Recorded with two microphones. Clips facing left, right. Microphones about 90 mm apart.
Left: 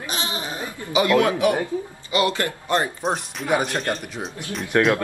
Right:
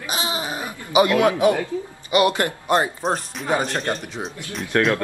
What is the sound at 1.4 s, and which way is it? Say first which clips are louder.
Speech: right 2 dB; 20° right (ahead or behind).